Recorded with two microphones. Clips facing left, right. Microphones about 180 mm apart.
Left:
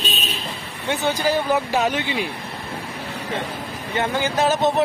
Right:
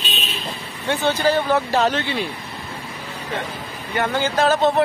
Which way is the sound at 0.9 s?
15° left (ahead or behind).